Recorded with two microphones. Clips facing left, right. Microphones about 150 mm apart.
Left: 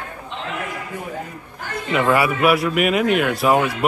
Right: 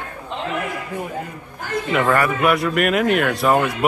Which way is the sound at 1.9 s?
5° left (ahead or behind).